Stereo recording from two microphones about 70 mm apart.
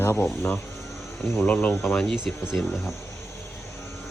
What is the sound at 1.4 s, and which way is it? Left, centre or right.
Speech, left.